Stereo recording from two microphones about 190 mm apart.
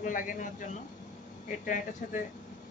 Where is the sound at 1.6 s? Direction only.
45° left (ahead or behind).